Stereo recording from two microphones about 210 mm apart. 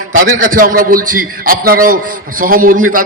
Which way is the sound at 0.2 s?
40° right (ahead or behind).